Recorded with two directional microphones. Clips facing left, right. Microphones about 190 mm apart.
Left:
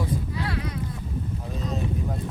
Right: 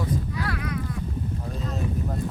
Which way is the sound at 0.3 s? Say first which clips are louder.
Even; 25° left (ahead or behind).